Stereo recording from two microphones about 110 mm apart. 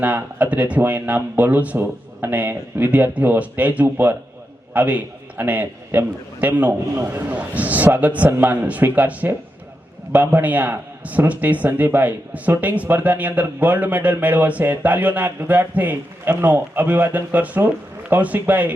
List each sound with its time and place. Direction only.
0.0 s a man's voice: 15° right (ahead or behind)